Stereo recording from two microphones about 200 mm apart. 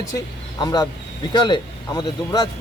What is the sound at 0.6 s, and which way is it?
Speech, 20° left (ahead or behind).